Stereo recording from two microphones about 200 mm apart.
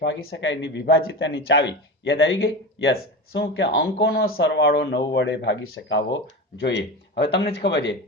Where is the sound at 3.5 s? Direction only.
70° left (ahead or behind).